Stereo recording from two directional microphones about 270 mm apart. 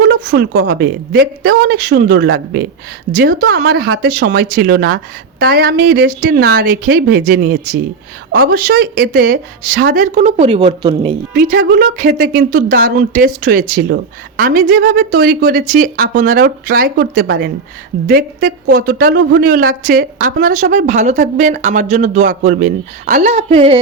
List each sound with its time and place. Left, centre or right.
0.0 s speech: right; by 11.1 s centre
11.3 s a woman's voice: right